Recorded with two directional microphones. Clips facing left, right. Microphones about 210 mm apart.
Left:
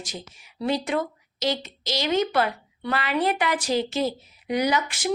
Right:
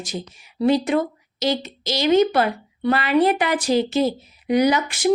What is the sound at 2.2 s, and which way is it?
Speech, 35° right (ahead or behind).